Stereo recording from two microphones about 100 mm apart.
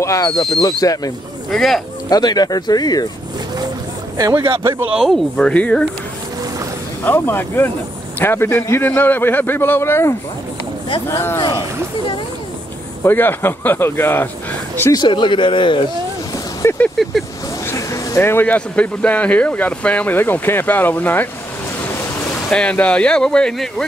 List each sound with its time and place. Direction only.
0.0 s speech: 35° left (ahead or behind)
1.5 s speech: 5° left (ahead or behind)
2.0 s speech: 40° left (ahead or behind)
4.9 s speech: centre (ahead or behind)
5.5 s speech: 10° left (ahead or behind)
7.1 s a man's voice: 20° left (ahead or behind)
13.0 s a man's voice: 20° left (ahead or behind)
14.9 s speech: 45° left (ahead or behind)
16.6 s speech: 15° left (ahead or behind)
17.6 s speech: 30° left (ahead or behind)
22.5 s speech: 10° left (ahead or behind)